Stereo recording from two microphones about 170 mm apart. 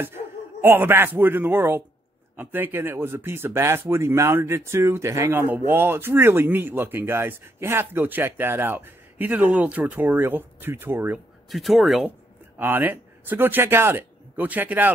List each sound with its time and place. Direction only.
0.0 s speech: 15° right (ahead or behind)
11.5 s speech: centre (ahead or behind)
12.5 s speech: 10° right (ahead or behind)